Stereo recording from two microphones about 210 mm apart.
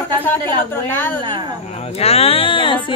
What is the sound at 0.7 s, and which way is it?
Speech, 10° left (ahead or behind).